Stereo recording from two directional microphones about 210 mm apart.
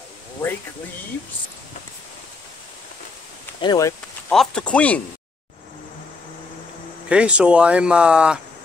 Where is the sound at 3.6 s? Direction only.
15° left (ahead or behind).